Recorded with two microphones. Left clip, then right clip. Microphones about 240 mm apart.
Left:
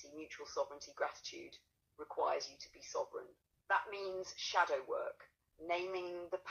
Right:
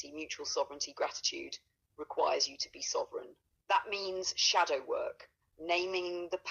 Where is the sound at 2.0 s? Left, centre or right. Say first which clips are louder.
Right 6 dB; right.